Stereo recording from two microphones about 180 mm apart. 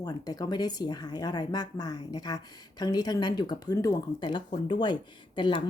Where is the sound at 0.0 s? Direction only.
20° left (ahead or behind).